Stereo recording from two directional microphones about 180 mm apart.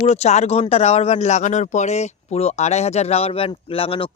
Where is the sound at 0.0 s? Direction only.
35° left (ahead or behind).